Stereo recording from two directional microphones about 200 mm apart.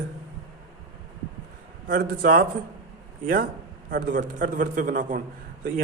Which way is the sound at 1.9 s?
45° right (ahead or behind).